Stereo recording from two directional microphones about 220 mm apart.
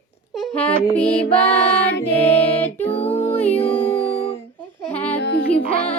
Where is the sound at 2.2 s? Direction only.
10° left (ahead or behind).